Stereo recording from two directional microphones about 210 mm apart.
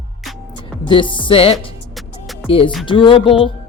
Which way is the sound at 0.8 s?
25° left (ahead or behind).